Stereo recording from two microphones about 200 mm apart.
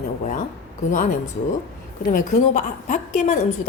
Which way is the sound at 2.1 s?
40° left (ahead or behind).